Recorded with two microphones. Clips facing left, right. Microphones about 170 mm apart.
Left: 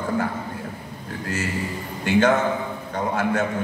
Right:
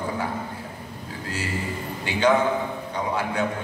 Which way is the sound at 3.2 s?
45° left (ahead or behind).